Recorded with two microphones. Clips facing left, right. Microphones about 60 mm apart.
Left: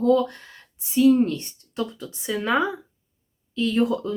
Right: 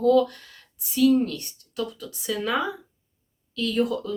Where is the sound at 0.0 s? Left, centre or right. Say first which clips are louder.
Even; left.